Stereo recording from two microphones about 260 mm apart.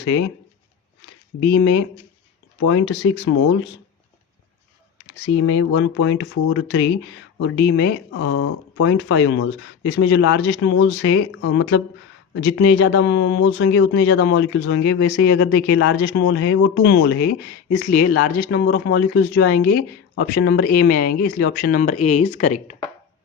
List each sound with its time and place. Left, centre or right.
1.0 s a sound: left
2.6 s speech: left
5.4 s speech: left